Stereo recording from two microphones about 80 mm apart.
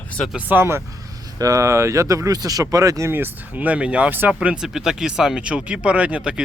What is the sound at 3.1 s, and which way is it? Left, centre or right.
Speech, right.